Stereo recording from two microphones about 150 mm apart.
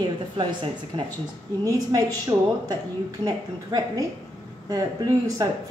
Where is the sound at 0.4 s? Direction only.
30° right (ahead or behind).